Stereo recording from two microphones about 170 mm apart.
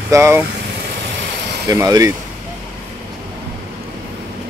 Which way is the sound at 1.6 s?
20° right (ahead or behind).